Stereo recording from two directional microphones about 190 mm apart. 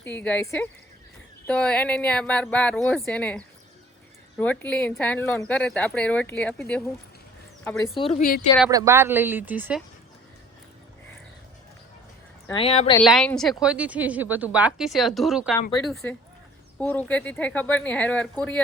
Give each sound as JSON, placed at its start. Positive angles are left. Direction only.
{"t": 0.0, "sound": "speech", "side_deg": 10}
{"t": 7.9, "sound": "speech", "side_deg": 30}
{"t": 8.2, "sound": "speech", "side_deg": 45}
{"t": 8.7, "sound": "speech", "side_deg": -15}
{"t": 12.5, "sound": "speech", "side_deg": 30}
{"t": 13.0, "sound": "a woman's voice", "side_deg": 5}